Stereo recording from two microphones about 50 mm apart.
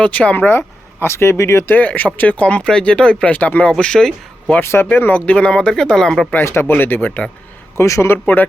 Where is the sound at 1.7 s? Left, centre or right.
Left; by 3.3 s centre.